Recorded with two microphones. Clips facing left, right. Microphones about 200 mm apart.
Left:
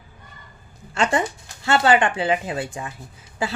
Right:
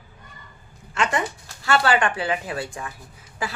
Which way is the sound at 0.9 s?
30° left (ahead or behind).